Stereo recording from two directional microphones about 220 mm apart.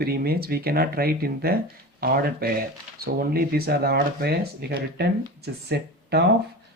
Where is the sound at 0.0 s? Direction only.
45° right (ahead or behind).